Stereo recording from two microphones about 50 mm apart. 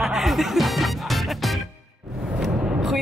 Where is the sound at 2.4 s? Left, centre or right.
Centre.